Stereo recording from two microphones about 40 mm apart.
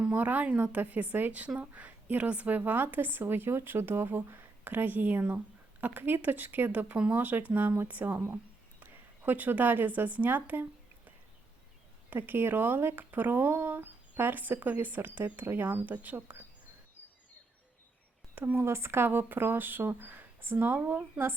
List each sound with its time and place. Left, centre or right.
0.1 s speech: right
6.0 s speech: right
6.2 s speech: right
7.1 s speech: right
12.1 s speech: right
18.5 s speech: right